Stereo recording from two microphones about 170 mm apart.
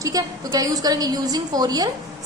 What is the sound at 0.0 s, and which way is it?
A woman's voice, 20° right (ahead or behind).